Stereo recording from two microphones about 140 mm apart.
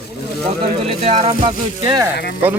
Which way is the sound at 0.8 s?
45° right (ahead or behind).